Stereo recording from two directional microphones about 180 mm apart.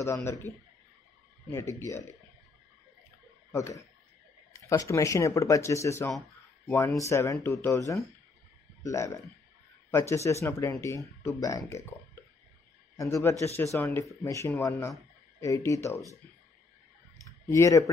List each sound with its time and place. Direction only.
0.0 s speech: 15° left (ahead or behind)
1.5 s speech: 15° left (ahead or behind)
3.5 s speech: 15° left (ahead or behind)
17.2 s a sound: 15° left (ahead or behind)